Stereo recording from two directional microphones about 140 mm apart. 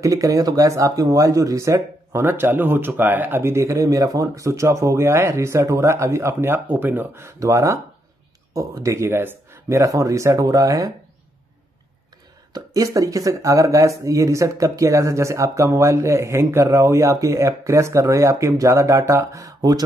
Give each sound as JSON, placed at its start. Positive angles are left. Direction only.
{"t": 0.0, "sound": "speech", "side_deg": -25}
{"t": 12.5, "sound": "speech", "side_deg": -25}